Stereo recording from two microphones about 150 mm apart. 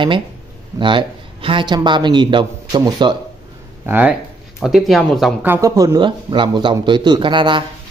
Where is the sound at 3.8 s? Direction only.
10° right (ahead or behind).